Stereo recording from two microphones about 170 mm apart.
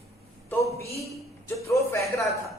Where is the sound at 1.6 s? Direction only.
15° left (ahead or behind).